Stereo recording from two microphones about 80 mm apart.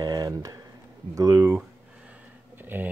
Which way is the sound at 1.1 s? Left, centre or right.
Right.